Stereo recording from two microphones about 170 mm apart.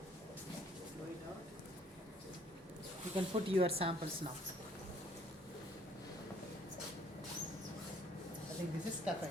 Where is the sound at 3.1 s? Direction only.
30° right (ahead or behind).